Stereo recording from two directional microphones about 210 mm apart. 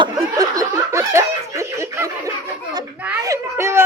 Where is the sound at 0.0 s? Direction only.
15° right (ahead or behind).